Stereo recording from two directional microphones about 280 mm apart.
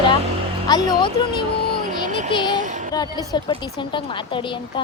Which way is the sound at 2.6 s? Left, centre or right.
Right.